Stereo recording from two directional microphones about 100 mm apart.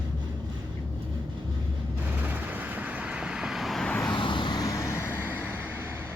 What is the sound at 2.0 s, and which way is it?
Vehicle, 20° right (ahead or behind).